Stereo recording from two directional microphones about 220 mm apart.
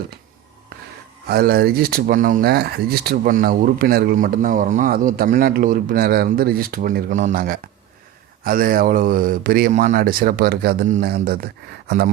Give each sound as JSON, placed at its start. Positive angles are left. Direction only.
{"t": 1.3, "sound": "speech", "side_deg": -45}